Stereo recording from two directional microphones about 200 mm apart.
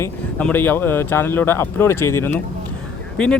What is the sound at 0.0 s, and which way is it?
Speech, 10° left (ahead or behind).